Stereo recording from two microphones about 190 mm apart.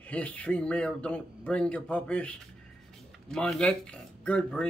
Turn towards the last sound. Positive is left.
turn(degrees=5)  # may be behind; listen again after turning